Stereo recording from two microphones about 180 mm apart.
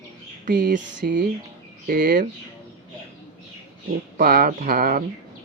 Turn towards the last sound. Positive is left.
turn(degrees=-55)  # may be behind; listen again after turning